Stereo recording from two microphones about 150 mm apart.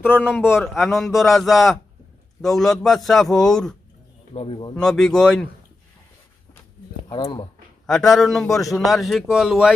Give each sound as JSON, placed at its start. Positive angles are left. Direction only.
{"t": 0.4, "sound": "a man's voice", "side_deg": 0}
{"t": 4.4, "sound": "speech", "side_deg": 35}
{"t": 4.7, "sound": "a man's voice", "side_deg": 5}
{"t": 7.1, "sound": "speech", "side_deg": 30}
{"t": 7.9, "sound": "a man's voice", "side_deg": 0}